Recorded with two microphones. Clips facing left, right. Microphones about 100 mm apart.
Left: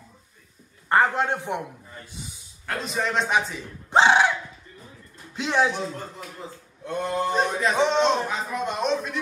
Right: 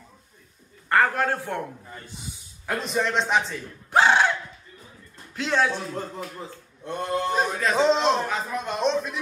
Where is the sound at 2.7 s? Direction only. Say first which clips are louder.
Right 2 dB; centre (ahead or behind).